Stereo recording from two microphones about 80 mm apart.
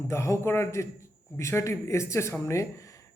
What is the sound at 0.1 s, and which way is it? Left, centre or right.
A man's voice, left.